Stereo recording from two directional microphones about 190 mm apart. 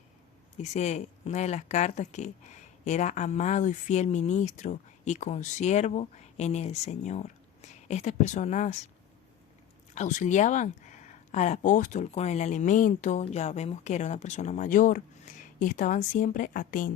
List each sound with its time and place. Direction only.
0.5 s speech: 40° left (ahead or behind)
9.9 s speech: 40° left (ahead or behind)